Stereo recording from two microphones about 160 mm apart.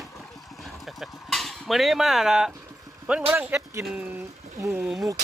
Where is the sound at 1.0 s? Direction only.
Centre (ahead or behind).